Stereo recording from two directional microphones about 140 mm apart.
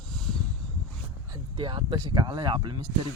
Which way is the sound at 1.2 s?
35° right (ahead or behind).